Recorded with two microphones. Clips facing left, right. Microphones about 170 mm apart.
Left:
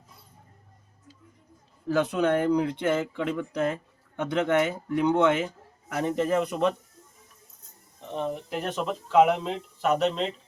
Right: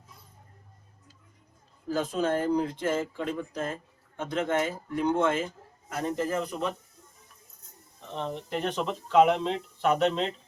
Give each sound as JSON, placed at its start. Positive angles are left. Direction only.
{"t": 1.9, "sound": "speech", "side_deg": 70}
{"t": 8.1, "sound": "speech", "side_deg": 10}